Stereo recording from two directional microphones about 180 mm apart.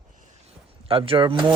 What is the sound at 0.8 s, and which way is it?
Speech, 30° right (ahead or behind).